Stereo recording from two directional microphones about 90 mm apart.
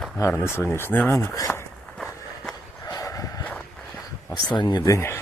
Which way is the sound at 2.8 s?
40° left (ahead or behind).